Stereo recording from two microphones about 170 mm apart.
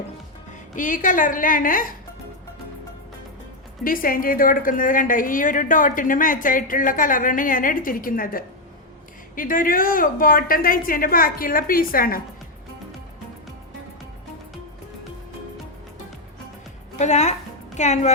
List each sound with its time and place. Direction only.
0.8 s a woman's voice: 50° left (ahead or behind)
3.8 s a woman's voice: 60° left (ahead or behind)
17.0 s a woman's voice: 45° left (ahead or behind)